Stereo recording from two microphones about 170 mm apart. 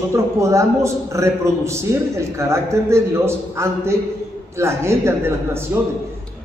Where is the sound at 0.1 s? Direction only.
15° right (ahead or behind).